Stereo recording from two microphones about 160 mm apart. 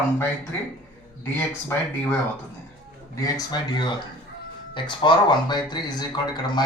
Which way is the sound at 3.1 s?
20° left (ahead or behind).